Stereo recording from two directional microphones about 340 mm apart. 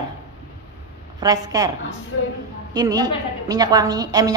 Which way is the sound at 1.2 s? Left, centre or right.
Centre.